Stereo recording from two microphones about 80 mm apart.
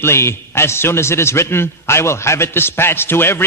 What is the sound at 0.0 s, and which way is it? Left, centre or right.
A man's voice, left.